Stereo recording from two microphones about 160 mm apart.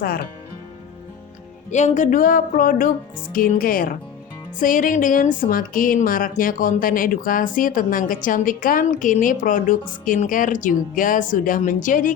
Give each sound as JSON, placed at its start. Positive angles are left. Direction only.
{"t": 0.0, "sound": "speech", "side_deg": 70}
{"t": 1.7, "sound": "a woman's voice", "side_deg": 50}